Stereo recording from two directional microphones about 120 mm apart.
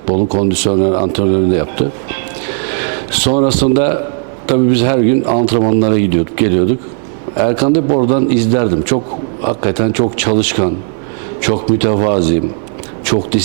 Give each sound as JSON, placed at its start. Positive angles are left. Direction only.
{"t": 0.1, "sound": "a man's voice", "side_deg": -25}
{"t": 2.8, "sound": "a sound", "side_deg": -20}
{"t": 3.5, "sound": "a man's voice", "side_deg": -15}
{"t": 11.8, "sound": "speech", "side_deg": -20}